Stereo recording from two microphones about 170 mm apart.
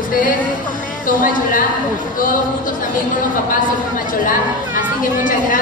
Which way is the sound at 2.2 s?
50° left (ahead or behind).